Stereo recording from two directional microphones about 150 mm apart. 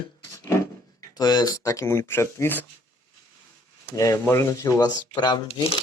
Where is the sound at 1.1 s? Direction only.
25° left (ahead or behind).